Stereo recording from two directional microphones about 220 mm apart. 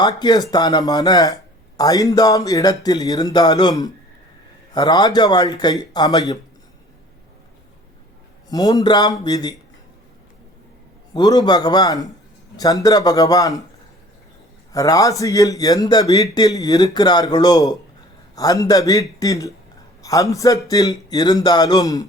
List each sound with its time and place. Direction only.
0.0 s speech: 20° left (ahead or behind)
8.4 s speech: 15° left (ahead or behind)
11.1 s speech: 20° left (ahead or behind)
14.7 s a man's voice: 15° left (ahead or behind)